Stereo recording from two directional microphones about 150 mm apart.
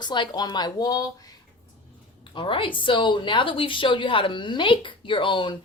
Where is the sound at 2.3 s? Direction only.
35° left (ahead or behind).